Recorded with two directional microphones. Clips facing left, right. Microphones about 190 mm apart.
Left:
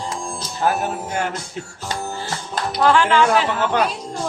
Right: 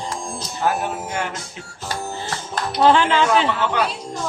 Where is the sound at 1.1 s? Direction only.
40° left (ahead or behind).